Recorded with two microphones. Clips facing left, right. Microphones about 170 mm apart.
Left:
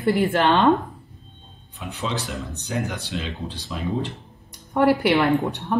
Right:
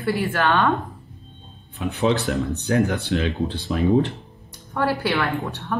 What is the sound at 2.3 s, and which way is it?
Speech, 55° right (ahead or behind).